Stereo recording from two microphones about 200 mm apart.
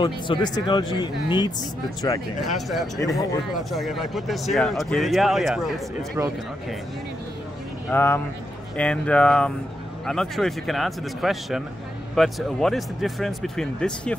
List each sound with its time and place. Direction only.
0.0 s speech: 20° left (ahead or behind)
2.4 s speech: centre (ahead or behind)
3.0 s speech: 15° left (ahead or behind)
3.5 s speech: centre (ahead or behind)
7.9 s speech: 10° left (ahead or behind)